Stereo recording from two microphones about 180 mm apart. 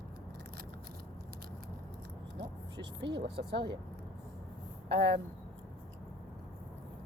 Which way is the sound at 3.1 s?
75° right (ahead or behind).